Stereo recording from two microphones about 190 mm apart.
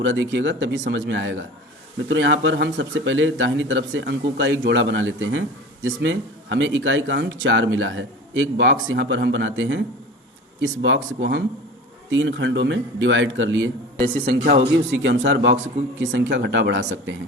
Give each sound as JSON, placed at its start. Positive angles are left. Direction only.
{"t": 0.0, "sound": "speech", "side_deg": -75}
{"t": 14.3, "sound": "a man's voice", "side_deg": -60}